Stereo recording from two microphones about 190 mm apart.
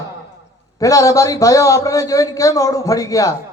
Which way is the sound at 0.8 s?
20° left (ahead or behind).